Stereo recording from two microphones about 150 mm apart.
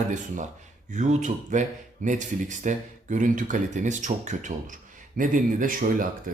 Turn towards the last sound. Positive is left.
turn(degrees=-65)  # may be behind; listen again after turning